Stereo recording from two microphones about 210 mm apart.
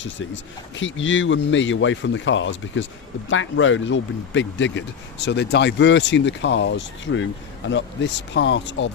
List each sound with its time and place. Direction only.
0.8 s speech: 65° left (ahead or behind)
8.3 s speech: 55° left (ahead or behind)